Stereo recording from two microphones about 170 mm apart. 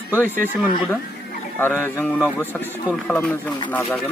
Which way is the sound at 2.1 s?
5° right (ahead or behind).